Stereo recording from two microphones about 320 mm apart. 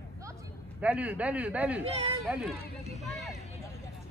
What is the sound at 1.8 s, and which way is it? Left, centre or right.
Speech, centre.